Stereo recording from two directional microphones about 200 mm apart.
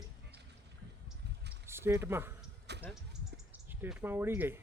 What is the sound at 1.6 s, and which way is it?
Speech, 10° right (ahead or behind).